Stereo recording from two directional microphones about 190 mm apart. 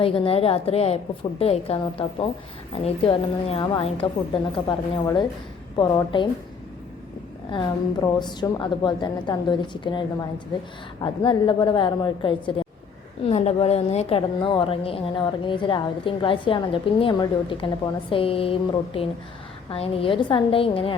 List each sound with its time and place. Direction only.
0.0 s a woman's voice: 30° left (ahead or behind)
5.7 s a woman's voice: 20° left (ahead or behind)
7.5 s a woman's voice: 25° left (ahead or behind)